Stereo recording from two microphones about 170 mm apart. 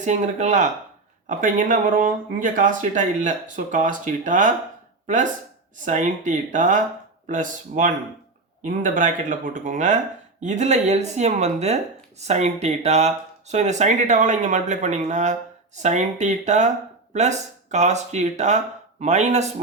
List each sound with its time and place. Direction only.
0.0 s speech: 45° right (ahead or behind)